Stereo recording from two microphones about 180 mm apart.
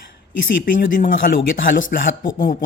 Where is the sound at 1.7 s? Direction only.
50° left (ahead or behind).